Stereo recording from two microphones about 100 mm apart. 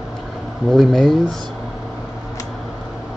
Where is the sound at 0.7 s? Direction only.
Centre (ahead or behind).